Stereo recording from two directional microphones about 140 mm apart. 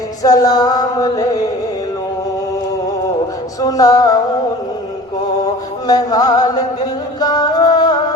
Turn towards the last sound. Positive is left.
turn(degrees=30)  # may be behind; listen again after turning